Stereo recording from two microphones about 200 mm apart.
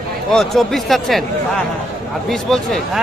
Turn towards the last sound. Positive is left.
turn(degrees=0)  # may be behind; listen again after turning